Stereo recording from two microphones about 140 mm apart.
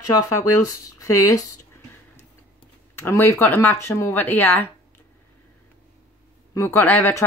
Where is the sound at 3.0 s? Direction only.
20° left (ahead or behind).